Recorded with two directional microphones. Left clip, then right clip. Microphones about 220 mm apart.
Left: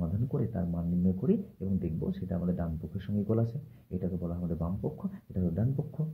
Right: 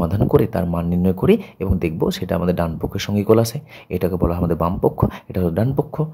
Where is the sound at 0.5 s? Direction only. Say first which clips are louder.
Right 15 dB; 45° right (ahead or behind).